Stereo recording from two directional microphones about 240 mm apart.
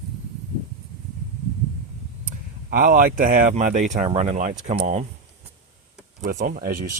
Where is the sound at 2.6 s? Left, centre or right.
Right.